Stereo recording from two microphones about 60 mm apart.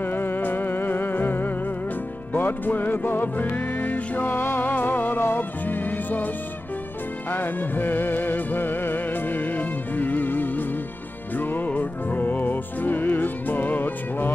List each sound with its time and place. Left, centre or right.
0.0 s music: left